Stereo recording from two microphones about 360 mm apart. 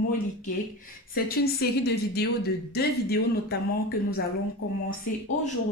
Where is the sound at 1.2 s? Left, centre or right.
Left.